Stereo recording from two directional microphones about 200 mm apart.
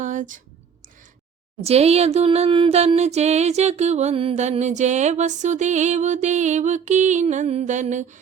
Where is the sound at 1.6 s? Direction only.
30° right (ahead or behind).